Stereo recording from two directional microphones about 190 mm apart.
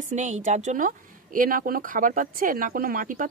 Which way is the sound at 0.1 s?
40° right (ahead or behind).